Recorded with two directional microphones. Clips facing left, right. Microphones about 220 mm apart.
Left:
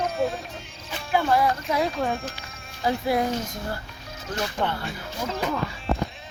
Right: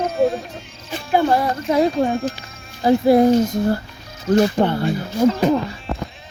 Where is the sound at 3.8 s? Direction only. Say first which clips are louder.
Right 11 dB; centre (ahead or behind).